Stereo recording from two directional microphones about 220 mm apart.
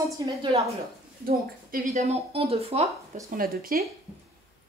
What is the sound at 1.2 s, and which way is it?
Speech, 40° right (ahead or behind).